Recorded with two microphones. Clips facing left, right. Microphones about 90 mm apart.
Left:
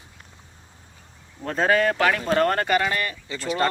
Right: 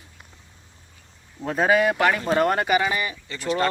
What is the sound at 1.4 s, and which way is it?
Speech, 10° right (ahead or behind).